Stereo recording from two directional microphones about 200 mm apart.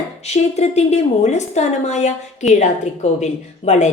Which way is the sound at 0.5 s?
35° left (ahead or behind).